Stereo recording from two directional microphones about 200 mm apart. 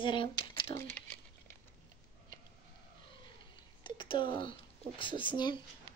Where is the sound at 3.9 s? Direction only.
25° left (ahead or behind).